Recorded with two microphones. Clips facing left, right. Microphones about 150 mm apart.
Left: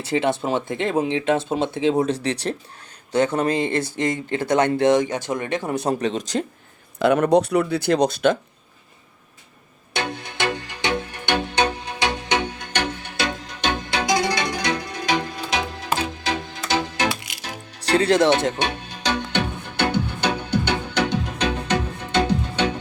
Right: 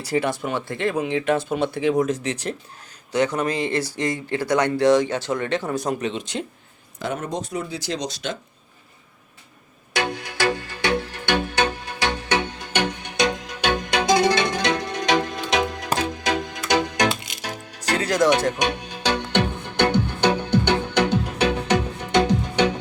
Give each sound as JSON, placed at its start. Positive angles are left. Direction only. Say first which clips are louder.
{"t": 0.0, "sound": "speech", "louder": "left 2 dB", "side_deg": 25}
{"t": 7.0, "sound": "speech", "louder": "left 11 dB", "side_deg": 70}
{"t": 9.9, "sound": "music", "louder": "right 2 dB", "side_deg": 25}
{"t": 12.5, "sound": "music", "louder": "right 1 dB", "side_deg": -15}
{"t": 17.8, "sound": "speech", "louder": "left 3 dB", "side_deg": 30}
{"t": 18.6, "sound": "music", "louder": "right 2 dB", "side_deg": -15}
{"t": 20.5, "sound": "music", "louder": "right 3 dB", "side_deg": 10}
{"t": 21.1, "sound": "music", "louder": "right 2 dB", "side_deg": -10}